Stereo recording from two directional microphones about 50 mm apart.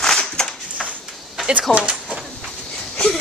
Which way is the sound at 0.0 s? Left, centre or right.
Centre.